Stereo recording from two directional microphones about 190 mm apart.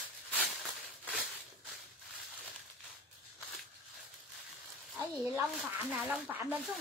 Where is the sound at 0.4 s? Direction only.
5° left (ahead or behind).